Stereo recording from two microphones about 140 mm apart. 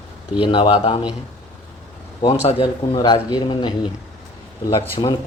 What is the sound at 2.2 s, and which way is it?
Speech, 40° left (ahead or behind).